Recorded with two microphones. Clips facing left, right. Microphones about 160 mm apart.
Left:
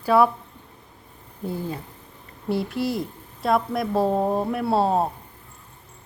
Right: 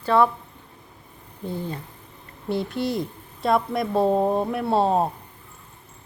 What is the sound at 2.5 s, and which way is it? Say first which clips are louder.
A woman's voice: even; 5° left (ahead or behind).